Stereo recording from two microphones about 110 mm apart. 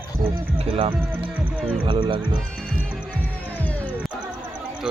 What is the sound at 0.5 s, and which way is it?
Speech, 55° right (ahead or behind).